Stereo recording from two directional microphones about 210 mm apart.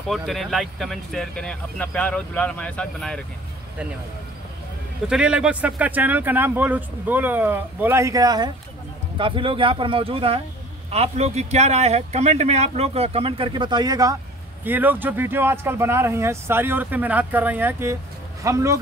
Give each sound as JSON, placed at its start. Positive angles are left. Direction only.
{"t": 0.1, "sound": "speech", "side_deg": 0}
{"t": 5.0, "sound": "speech", "side_deg": -5}